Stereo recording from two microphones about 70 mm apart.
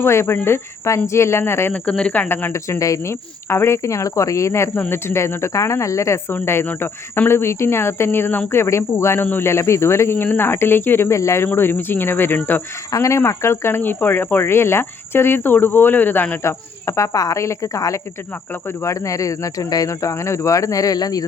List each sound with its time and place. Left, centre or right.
0.0 s speech: left
1.7 s speech: centre
2.5 s speech: left
6.3 s speech: left
9.2 s speech: left
9.5 s speech: left
11.4 s speech: left
12.9 s speech: left
16.4 s speech: left